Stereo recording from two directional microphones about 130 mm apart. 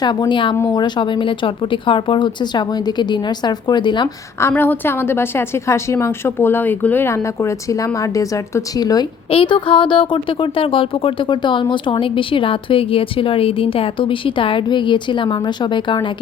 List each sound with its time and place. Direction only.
0.0 s speech: 35° left (ahead or behind)
4.4 s a woman's voice: 20° left (ahead or behind)
9.3 s speech: 40° left (ahead or behind)